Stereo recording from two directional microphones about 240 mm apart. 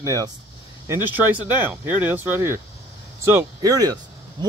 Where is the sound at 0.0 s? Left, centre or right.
Centre.